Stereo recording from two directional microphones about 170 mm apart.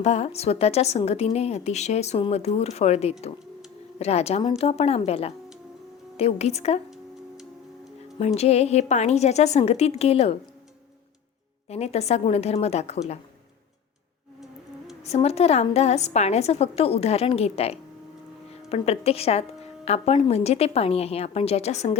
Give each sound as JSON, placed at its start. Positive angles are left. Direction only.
{"t": 0.0, "sound": "a woman's voice", "side_deg": 40}
{"t": 8.4, "sound": "a woman's voice", "side_deg": 40}
{"t": 11.7, "sound": "a woman's voice", "side_deg": 40}
{"t": 15.0, "sound": "a woman's voice", "side_deg": 40}